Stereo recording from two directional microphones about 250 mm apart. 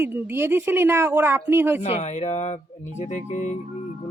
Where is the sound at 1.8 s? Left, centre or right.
Left.